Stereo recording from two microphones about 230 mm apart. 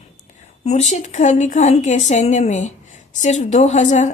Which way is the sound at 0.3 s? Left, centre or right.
Left.